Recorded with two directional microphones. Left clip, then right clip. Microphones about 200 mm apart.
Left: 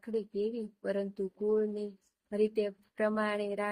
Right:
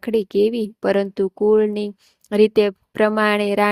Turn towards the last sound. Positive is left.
turn(degrees=-50)  # may be behind; listen again after turning